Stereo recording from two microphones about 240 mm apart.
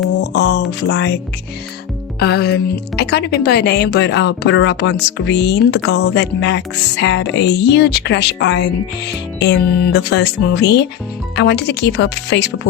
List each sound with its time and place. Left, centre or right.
0.2 s speech: left
2.1 s music: left
2.9 s speech: left